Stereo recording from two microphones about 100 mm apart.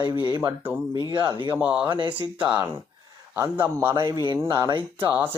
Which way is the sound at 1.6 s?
10° right (ahead or behind).